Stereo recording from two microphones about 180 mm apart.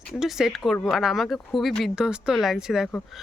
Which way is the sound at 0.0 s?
Centre (ahead or behind).